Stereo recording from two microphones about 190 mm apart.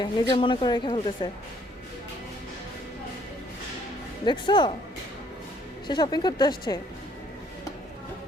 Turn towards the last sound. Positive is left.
turn(degrees=20)  # may be behind; listen again after turning